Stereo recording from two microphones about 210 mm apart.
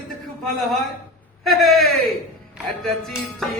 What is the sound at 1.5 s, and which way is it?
Music, centre (ahead or behind).